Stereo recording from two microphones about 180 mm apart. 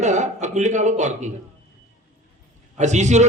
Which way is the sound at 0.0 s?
40° right (ahead or behind).